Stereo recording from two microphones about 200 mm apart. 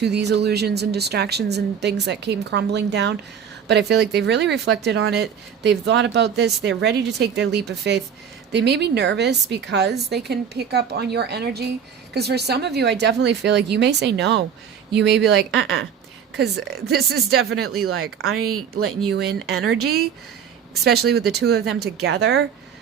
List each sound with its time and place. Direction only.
0.0 s speech: 55° right (ahead or behind)
17.8 s speech: 90° right
19.1 s speech: 55° right (ahead or behind)
19.6 s speech: 75° right (ahead or behind)
21.1 s speech: 55° right (ahead or behind)